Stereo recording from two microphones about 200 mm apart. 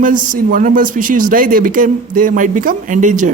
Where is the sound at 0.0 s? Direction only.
40° right (ahead or behind).